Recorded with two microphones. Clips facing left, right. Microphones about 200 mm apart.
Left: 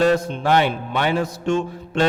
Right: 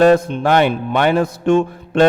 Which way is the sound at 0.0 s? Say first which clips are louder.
Right 6 dB; 55° right (ahead or behind).